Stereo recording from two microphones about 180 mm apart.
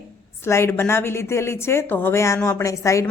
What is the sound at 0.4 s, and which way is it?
A woman's voice, 15° left (ahead or behind).